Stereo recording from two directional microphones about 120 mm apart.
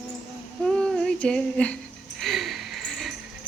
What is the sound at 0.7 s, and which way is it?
Female singing, 5° left (ahead or behind).